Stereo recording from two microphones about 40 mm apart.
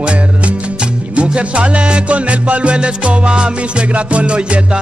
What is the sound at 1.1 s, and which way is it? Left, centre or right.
Music, right.